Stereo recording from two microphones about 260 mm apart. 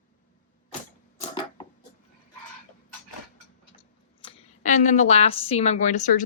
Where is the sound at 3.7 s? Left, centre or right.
Left.